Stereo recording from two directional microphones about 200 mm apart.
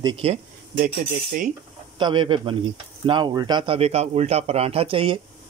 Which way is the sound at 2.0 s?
25° right (ahead or behind).